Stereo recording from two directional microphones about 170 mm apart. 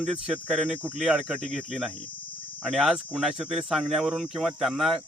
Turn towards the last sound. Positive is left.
turn(degrees=0)  # may be behind; listen again after turning